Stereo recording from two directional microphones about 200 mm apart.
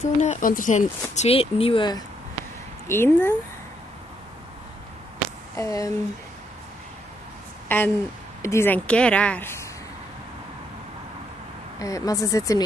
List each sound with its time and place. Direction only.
0.0 s speech: 35° left (ahead or behind)
2.9 s speech: 10° left (ahead or behind)
5.6 s speech: 15° left (ahead or behind)
7.6 s a woman's voice: 10° left (ahead or behind)
11.8 s speech: 15° left (ahead or behind)